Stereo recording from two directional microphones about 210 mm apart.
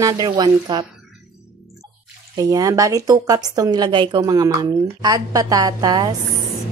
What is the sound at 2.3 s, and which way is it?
A woman's voice, 15° right (ahead or behind).